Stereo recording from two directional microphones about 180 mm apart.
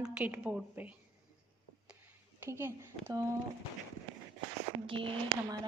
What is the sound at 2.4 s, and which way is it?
Speech, 10° right (ahead or behind).